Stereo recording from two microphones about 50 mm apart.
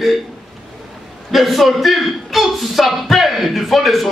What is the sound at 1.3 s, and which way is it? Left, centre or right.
Speech, centre.